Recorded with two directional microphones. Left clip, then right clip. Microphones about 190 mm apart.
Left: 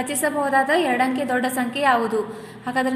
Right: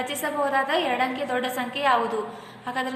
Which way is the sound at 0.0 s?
20° left (ahead or behind).